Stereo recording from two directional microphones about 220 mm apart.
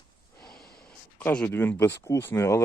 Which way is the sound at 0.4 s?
Centre (ahead or behind).